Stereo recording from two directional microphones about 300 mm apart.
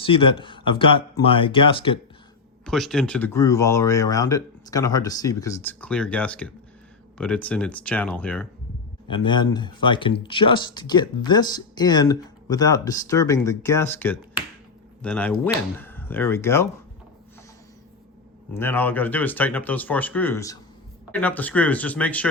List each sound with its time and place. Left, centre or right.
0.0 s speech: centre
2.6 s speech: centre
9.0 s speech: centre
18.5 s speech: centre